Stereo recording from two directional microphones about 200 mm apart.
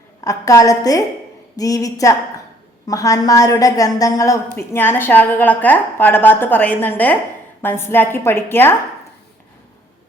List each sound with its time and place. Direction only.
0.2 s a woman's voice: 15° left (ahead or behind)